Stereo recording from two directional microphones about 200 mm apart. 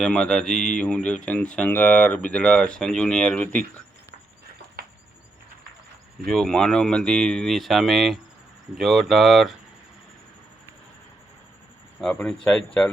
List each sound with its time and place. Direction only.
0.0 s speech: 5° left (ahead or behind)
4.8 s a sound: 50° right (ahead or behind)
6.2 s speech: 5° left (ahead or behind)
11.9 s speech: centre (ahead or behind)